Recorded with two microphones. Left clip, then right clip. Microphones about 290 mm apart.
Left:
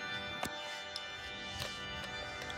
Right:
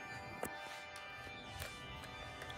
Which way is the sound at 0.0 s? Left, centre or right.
Left.